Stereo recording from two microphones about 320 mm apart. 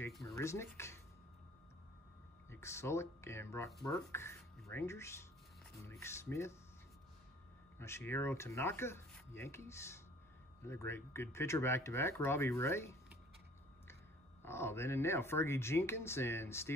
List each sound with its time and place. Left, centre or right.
0.3 s speech: centre
2.5 s speech: centre
7.8 s speech: centre
14.4 s speech: centre